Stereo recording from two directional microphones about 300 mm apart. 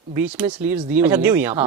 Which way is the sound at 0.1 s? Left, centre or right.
Centre.